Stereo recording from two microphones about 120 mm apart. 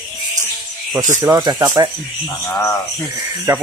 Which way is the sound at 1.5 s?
30° right (ahead or behind).